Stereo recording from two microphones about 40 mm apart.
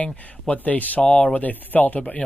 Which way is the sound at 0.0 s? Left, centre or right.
Left.